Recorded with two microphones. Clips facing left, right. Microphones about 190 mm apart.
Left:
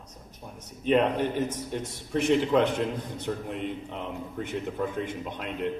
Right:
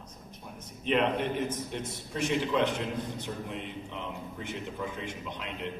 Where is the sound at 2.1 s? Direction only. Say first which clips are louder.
Left 6 dB; 55° left (ahead or behind).